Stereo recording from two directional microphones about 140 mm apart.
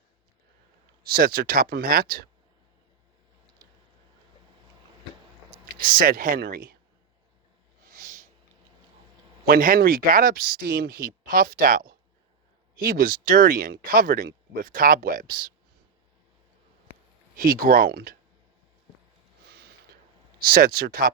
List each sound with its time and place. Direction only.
1.0 s speech: 90° right
5.7 s speech: 90° right
7.9 s a sound: 75° right (ahead or behind)
9.5 s speech: 85° right
17.3 s speech: 90° right
20.4 s speech: 90° right